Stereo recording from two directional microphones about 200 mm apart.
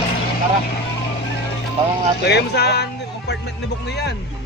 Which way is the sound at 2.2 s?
55° left (ahead or behind).